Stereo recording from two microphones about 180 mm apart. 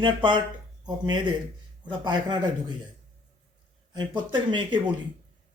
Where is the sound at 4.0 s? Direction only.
25° right (ahead or behind).